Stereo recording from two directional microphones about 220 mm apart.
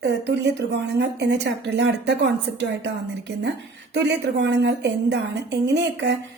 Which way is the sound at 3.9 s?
50° right (ahead or behind).